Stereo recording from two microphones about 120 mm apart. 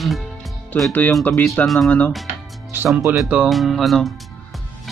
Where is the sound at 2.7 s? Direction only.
15° right (ahead or behind).